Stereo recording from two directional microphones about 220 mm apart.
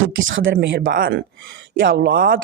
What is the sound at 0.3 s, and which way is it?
Speech, 55° right (ahead or behind).